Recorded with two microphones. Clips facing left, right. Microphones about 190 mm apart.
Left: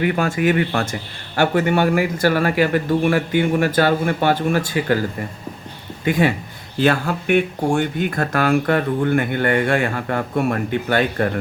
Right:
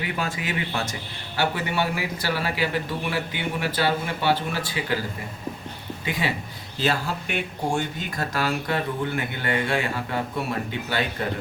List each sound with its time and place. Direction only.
0.0 s speech: 55° left (ahead or behind)
6.1 s speech: 50° left (ahead or behind)